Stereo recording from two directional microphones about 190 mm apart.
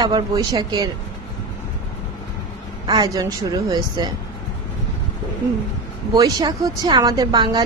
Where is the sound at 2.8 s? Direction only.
20° right (ahead or behind).